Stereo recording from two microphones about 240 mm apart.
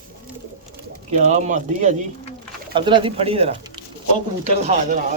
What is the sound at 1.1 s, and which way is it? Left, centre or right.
Speech, right.